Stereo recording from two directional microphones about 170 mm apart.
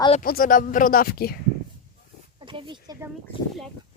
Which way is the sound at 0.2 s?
55° left (ahead or behind).